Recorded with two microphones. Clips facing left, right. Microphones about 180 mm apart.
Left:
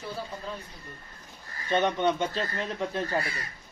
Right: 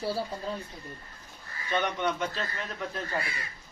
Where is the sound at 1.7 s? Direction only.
25° left (ahead or behind).